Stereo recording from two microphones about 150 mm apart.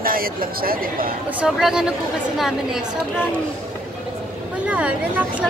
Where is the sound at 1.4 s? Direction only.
5° right (ahead or behind).